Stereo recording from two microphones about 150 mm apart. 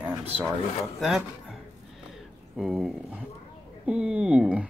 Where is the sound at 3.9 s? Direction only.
5° right (ahead or behind).